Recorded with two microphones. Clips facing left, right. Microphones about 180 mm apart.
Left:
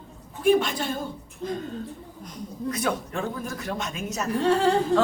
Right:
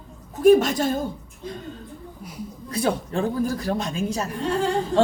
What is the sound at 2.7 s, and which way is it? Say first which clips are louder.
A woman's voice: right 5 dB; 30° right (ahead or behind).